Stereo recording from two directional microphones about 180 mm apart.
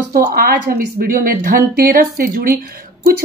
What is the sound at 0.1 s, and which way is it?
A woman's voice, 55° right (ahead or behind).